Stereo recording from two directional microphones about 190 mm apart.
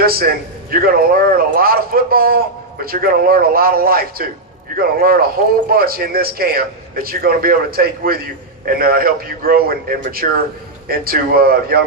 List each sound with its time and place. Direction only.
0.0 s a man's voice: 55° right (ahead or behind)